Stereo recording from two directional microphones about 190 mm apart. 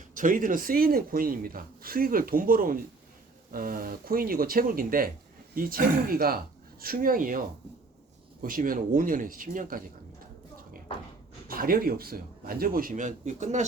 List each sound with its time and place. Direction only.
0.1 s speech: 45° right (ahead or behind)
11.4 s speech: 50° right (ahead or behind)